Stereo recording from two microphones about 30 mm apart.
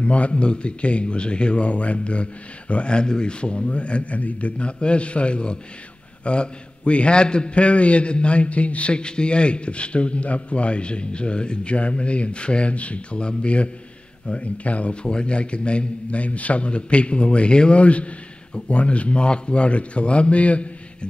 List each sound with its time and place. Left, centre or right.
0.0 s a man's voice: left
15.0 s a man's voice: left